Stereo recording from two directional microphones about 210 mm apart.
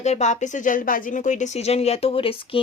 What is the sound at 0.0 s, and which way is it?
Speech, 35° left (ahead or behind).